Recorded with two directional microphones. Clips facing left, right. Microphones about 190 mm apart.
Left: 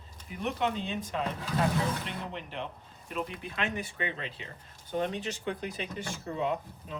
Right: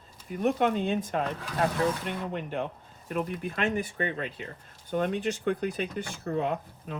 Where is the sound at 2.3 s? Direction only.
50° right (ahead or behind).